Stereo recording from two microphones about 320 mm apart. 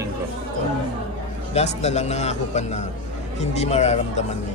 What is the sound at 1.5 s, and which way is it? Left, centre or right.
A man's voice, centre.